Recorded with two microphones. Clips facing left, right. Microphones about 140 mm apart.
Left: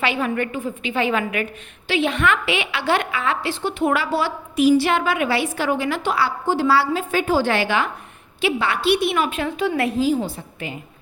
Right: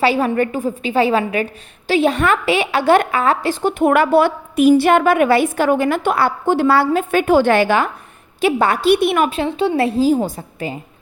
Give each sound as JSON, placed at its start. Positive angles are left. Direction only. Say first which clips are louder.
{"t": 0.0, "sound": "a woman's voice", "louder": "right 6 dB", "side_deg": -35}
{"t": 9.3, "sound": "a woman's voice", "louder": "right 5 dB", "side_deg": -30}